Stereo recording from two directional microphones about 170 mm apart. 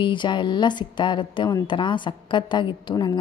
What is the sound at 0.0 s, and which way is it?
A woman's voice, 30° left (ahead or behind).